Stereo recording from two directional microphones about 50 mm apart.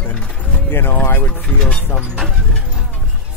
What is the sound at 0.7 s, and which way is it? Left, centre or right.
Speech, left.